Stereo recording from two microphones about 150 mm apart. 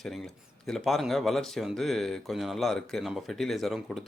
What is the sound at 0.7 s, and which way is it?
Speech, centre (ahead or behind).